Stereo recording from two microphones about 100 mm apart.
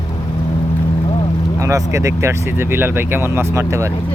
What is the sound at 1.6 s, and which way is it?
Speech, 35° right (ahead or behind).